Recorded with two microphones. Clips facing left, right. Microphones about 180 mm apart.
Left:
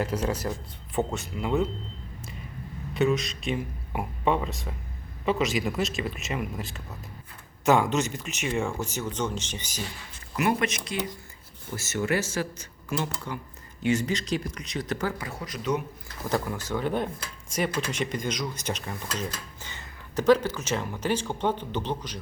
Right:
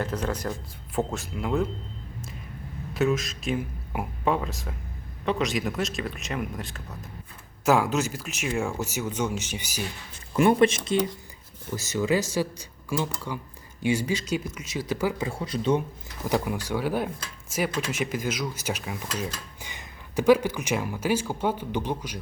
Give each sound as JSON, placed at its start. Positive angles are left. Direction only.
{"t": 0.0, "sound": "speech", "side_deg": 10}
{"t": 2.9, "sound": "speech", "side_deg": 0}
{"t": 10.3, "sound": "speech", "side_deg": -30}
{"t": 11.8, "sound": "speech", "side_deg": -15}
{"t": 13.8, "sound": "speech", "side_deg": -10}
{"t": 15.2, "sound": "speech", "side_deg": -25}
{"t": 16.2, "sound": "speech", "side_deg": -15}